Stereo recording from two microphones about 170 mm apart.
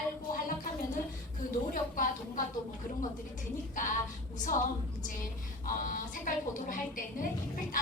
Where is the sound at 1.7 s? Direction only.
50° left (ahead or behind).